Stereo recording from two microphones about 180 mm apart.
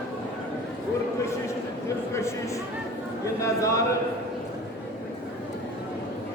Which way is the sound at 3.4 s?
15° left (ahead or behind).